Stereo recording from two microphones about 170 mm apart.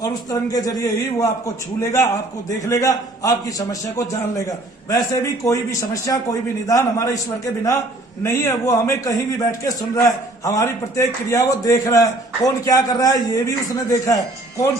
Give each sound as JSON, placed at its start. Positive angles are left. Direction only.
{"t": 0.0, "sound": "a man's voice", "side_deg": 20}